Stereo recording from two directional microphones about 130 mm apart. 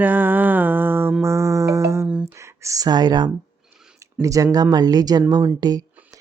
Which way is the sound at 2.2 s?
20° right (ahead or behind).